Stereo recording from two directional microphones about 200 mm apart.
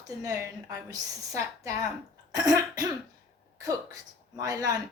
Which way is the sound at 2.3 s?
20° right (ahead or behind).